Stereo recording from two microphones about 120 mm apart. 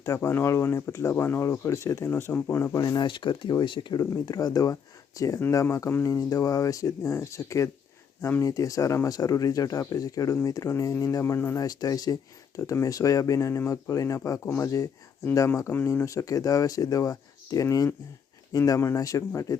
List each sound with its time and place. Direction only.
0.0 s speech: 25° left (ahead or behind)
2.8 s speech: 35° left (ahead or behind)
4.0 s speech: 30° left (ahead or behind)